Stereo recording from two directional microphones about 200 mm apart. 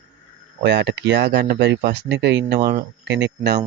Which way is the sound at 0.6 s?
60° right (ahead or behind).